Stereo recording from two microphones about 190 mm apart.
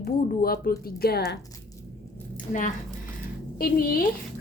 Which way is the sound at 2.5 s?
45° left (ahead or behind).